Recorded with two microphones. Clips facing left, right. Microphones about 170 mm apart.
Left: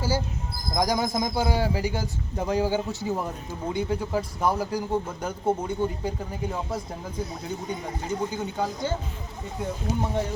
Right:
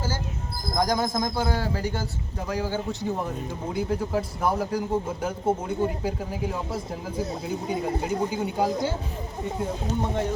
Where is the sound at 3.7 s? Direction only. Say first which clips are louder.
Even; centre (ahead or behind).